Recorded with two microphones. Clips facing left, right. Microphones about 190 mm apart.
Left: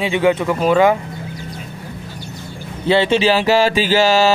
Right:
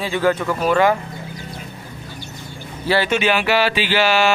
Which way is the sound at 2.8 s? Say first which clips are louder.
Left 4 dB; 25° left (ahead or behind).